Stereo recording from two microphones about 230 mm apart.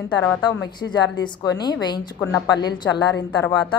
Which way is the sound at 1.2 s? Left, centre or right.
Centre.